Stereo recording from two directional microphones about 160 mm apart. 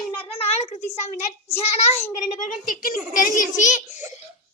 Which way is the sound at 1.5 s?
15° left (ahead or behind).